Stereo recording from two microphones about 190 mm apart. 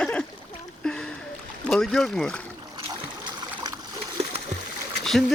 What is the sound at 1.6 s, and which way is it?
Speech, 5° left (ahead or behind).